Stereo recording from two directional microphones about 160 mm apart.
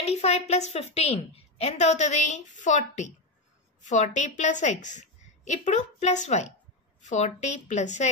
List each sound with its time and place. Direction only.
0.0 s a woman's voice: 40° left (ahead or behind)